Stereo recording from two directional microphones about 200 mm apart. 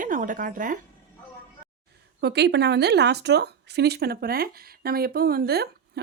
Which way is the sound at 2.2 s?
55° right (ahead or behind).